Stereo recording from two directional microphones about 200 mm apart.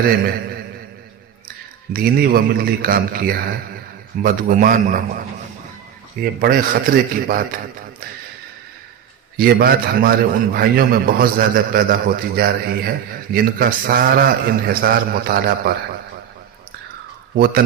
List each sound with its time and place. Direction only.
0.0 s a man's voice: 45° right (ahead or behind)
1.9 s a man's voice: 50° right (ahead or behind)
6.4 s a man's voice: 45° right (ahead or behind)
9.4 s a man's voice: 50° right (ahead or behind)
17.3 s a man's voice: 50° right (ahead or behind)